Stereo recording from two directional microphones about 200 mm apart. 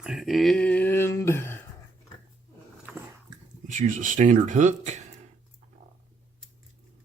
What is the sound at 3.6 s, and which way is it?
Speech, 40° right (ahead or behind).